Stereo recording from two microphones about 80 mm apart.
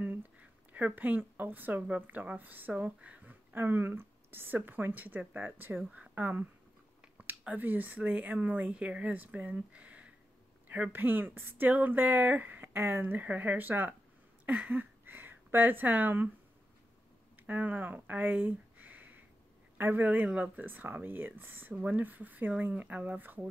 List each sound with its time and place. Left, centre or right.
0.0 s speech: right
17.5 s speech: right